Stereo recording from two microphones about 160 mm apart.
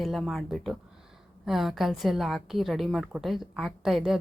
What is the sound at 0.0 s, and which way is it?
Speech, centre (ahead or behind).